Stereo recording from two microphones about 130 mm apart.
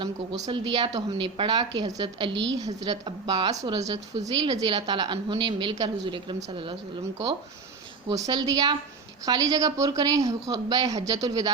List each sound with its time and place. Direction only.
0.0 s a woman's voice: 35° right (ahead or behind)
8.1 s a woman's voice: 30° right (ahead or behind)